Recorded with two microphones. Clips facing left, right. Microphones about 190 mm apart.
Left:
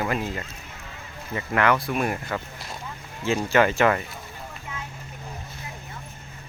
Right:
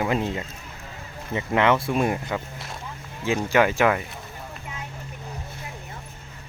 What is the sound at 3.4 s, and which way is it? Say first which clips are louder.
Speech: even; 10° right (ahead or behind).